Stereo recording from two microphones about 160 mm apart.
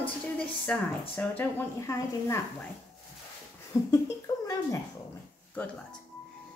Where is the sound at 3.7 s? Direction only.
20° left (ahead or behind).